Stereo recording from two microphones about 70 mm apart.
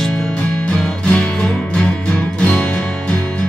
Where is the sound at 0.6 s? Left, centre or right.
Centre.